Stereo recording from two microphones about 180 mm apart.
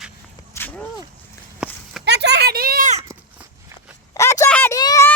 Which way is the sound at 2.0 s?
70° right (ahead or behind).